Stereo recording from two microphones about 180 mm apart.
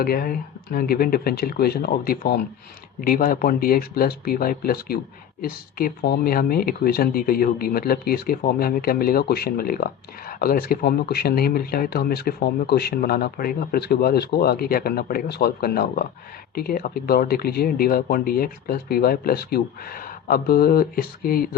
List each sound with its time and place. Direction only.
0.0 s speech: 55° left (ahead or behind)